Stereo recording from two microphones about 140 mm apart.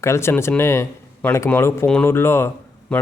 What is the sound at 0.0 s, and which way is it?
Speech, 20° left (ahead or behind).